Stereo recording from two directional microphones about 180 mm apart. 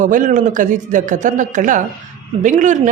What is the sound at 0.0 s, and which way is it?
Speech, 45° right (ahead or behind).